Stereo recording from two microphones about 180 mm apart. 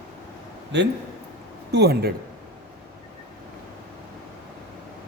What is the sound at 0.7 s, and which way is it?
Speech, 75° right (ahead or behind).